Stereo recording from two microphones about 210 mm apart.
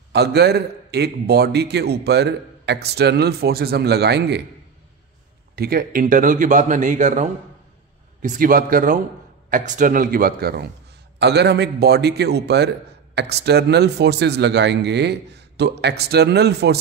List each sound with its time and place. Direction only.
0.1 s a man's voice: 50° right (ahead or behind)
5.6 s a man's voice: 45° right (ahead or behind)